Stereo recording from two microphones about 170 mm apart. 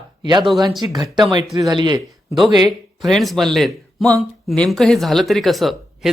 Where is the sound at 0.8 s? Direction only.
25° right (ahead or behind).